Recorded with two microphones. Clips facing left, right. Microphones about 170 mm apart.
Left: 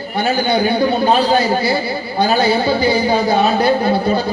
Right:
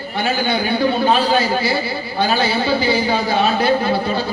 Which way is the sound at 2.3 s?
40° left (ahead or behind).